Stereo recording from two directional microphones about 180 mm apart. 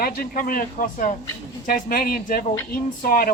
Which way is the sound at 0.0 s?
50° left (ahead or behind).